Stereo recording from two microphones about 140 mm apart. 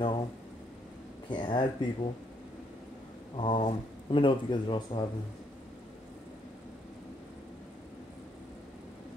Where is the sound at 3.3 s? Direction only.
40° left (ahead or behind).